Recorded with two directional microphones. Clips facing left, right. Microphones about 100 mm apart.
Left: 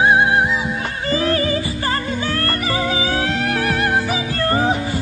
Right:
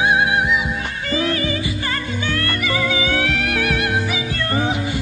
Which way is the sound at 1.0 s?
35° left (ahead or behind).